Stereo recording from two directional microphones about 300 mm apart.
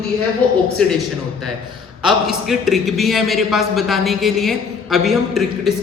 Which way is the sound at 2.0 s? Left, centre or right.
Centre.